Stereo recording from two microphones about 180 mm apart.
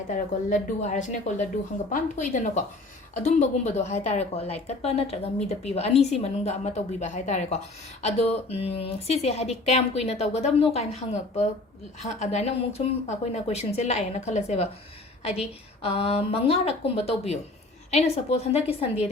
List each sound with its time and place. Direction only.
0.1 s speech: 40° left (ahead or behind)